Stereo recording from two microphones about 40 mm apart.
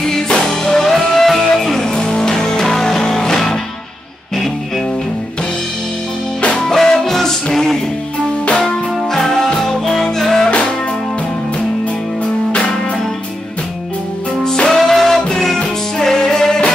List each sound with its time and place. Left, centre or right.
0.0 s music: centre
6.4 s music: centre
14.4 s music: centre